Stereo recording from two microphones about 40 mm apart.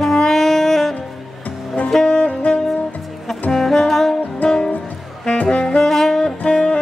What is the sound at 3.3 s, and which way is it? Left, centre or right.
Brass instrument, centre.